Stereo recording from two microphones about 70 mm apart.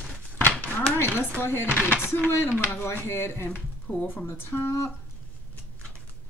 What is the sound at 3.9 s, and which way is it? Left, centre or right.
Speech, left.